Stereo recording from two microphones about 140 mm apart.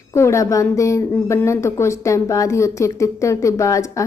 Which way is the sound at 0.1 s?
20° left (ahead or behind).